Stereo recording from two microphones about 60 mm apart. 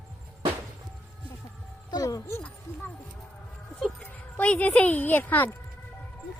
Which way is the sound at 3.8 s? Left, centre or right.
Centre.